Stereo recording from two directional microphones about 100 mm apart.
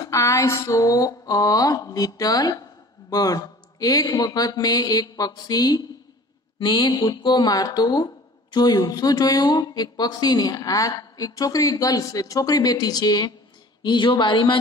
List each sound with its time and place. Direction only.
0.0 s speech: 30° left (ahead or behind); by 14.6 s 55° left (ahead or behind)